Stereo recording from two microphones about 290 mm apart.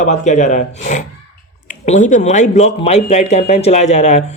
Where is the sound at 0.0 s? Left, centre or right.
Left.